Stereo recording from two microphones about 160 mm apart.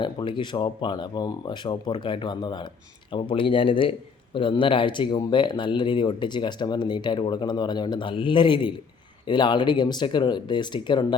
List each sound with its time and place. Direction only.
0.0 s speech: 30° left (ahead or behind)